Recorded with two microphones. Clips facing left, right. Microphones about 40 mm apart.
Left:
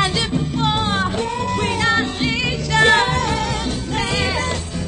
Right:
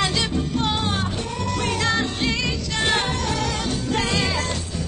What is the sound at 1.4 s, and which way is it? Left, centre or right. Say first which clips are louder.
Music: left 2 dB; left.